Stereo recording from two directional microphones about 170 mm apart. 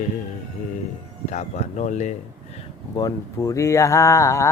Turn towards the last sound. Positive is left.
turn(degrees=15)  # may be behind; listen again after turning